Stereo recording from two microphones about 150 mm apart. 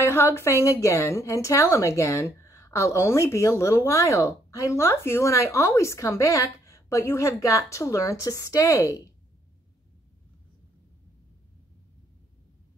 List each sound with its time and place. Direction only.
0.0 s a woman's voice: 15° left (ahead or behind)